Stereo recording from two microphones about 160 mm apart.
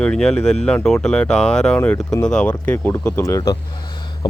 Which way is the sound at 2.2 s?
5° left (ahead or behind).